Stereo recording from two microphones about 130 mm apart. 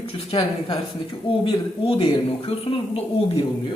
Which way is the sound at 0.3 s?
45° left (ahead or behind).